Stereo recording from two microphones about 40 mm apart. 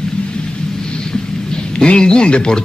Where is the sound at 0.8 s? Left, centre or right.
Centre.